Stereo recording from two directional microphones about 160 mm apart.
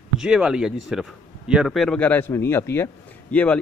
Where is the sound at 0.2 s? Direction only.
5° right (ahead or behind).